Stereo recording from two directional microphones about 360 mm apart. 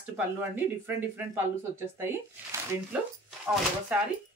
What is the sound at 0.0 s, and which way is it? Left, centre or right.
Speech, centre.